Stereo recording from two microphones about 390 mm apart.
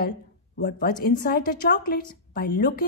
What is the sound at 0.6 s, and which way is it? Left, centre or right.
A woman's voice, left.